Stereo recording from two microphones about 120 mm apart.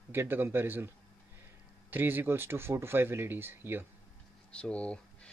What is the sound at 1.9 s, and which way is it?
Speech, 15° right (ahead or behind).